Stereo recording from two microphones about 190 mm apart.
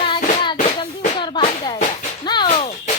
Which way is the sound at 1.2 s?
25° left (ahead or behind).